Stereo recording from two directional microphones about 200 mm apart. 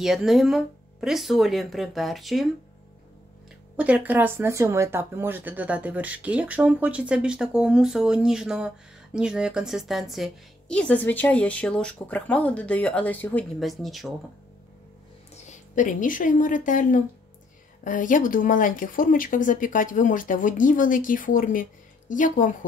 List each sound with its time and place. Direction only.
0.0 s speech: centre (ahead or behind)
3.7 s speech: 5° right (ahead or behind)
15.3 s speech: 40° left (ahead or behind)